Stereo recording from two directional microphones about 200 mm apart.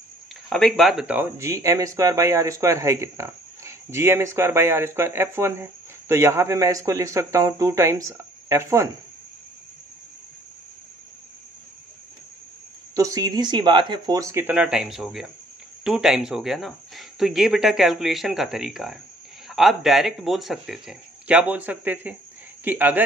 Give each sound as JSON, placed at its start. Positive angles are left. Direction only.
{"t": 0.5, "sound": "speech", "side_deg": 0}
{"t": 12.9, "sound": "speech", "side_deg": -15}